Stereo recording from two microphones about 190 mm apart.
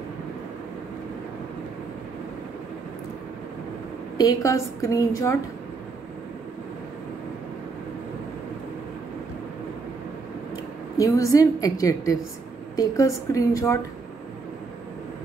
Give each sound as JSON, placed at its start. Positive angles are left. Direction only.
{"t": 4.2, "sound": "a woman's voice", "side_deg": 20}
{"t": 11.0, "sound": "a woman's voice", "side_deg": 15}